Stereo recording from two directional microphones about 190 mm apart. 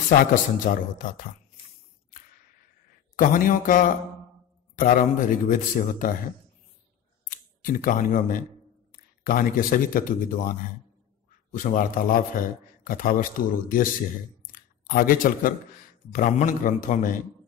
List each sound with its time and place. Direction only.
0.3 s a man's voice: 45° left (ahead or behind)
3.2 s a man's voice: 45° left (ahead or behind)
7.2 s a man's voice: 45° left (ahead or behind)
14.5 s a sound: 50° left (ahead or behind)
16.1 s a man's voice: 45° left (ahead or behind)